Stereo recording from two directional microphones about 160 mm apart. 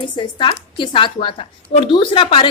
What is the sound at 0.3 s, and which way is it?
A woman's voice, 30° left (ahead or behind).